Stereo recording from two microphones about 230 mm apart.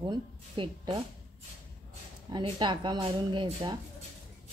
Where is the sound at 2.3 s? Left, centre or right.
Centre.